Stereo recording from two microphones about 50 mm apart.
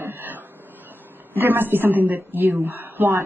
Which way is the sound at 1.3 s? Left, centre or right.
Right.